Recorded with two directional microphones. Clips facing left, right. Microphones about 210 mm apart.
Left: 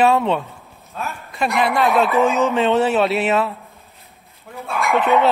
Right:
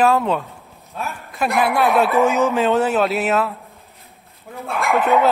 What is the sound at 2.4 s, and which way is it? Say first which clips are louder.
Speech: even; centre (ahead or behind).